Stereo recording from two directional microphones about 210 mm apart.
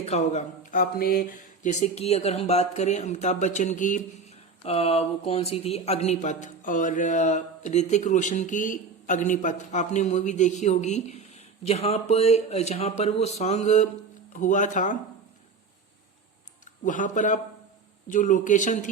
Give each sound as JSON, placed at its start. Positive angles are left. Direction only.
{"t": 0.0, "sound": "speech", "side_deg": 30}
{"t": 16.8, "sound": "speech", "side_deg": 35}